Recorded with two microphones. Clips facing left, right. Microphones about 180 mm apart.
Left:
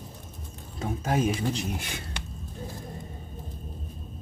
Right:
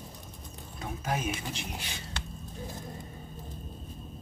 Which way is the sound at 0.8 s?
30° left (ahead or behind).